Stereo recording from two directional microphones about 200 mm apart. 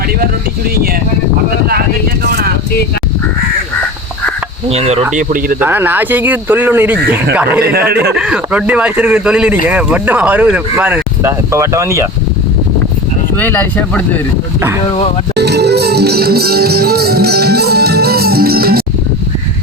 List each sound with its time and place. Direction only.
2.2 s vehicle: 50° right (ahead or behind)
4.7 s speech: 30° right (ahead or behind)
5.1 s speech: 45° right (ahead or behind)
5.5 s speech: 10° right (ahead or behind)
7.6 s speech: 50° right (ahead or behind)
8.1 s speech: 5° right (ahead or behind)
13.3 s speech: 10° left (ahead or behind)
14.8 s speech: 30° left (ahead or behind)
15.4 s music: 55° right (ahead or behind)